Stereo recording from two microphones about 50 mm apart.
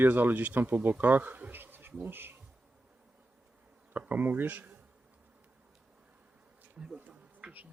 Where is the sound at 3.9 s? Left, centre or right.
Right.